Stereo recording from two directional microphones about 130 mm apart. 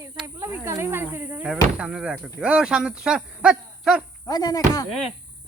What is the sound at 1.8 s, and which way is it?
Speech, 5° right (ahead or behind).